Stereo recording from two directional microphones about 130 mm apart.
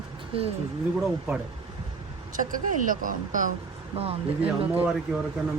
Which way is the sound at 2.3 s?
90° right.